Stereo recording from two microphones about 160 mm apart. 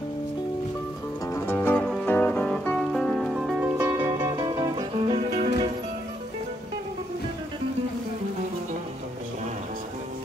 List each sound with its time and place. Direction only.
1.3 s music: 15° left (ahead or behind); by 3.7 s 5° right (ahead or behind)
3.7 s music: 25° right (ahead or behind)
5.1 s music: 35° right (ahead or behind)